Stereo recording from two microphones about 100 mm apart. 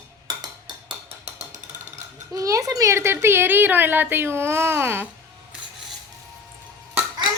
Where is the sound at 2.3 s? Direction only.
35° right (ahead or behind).